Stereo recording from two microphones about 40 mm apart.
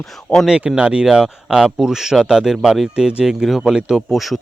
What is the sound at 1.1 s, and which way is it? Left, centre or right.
Speech, centre.